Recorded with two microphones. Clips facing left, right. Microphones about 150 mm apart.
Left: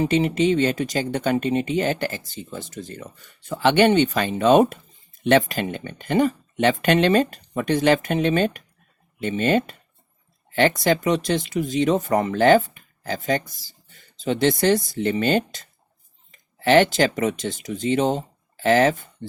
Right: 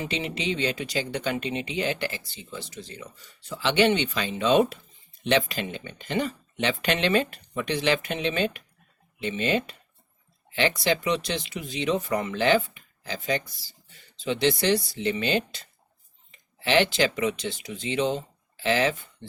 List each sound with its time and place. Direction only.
0.0 s speech: 45° left (ahead or behind)